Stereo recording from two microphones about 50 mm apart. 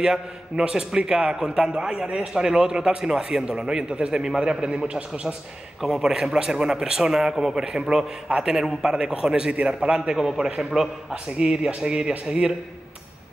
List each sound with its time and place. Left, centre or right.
0.0 s a man's voice: centre